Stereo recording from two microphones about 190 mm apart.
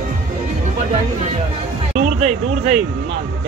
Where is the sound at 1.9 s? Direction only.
40° right (ahead or behind).